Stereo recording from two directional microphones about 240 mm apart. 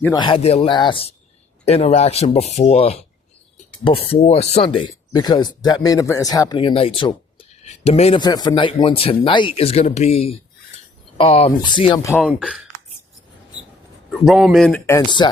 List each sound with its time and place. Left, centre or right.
0.0 s speech: centre
4.0 s speech: left
12.3 s speech: centre
14.3 s speech: centre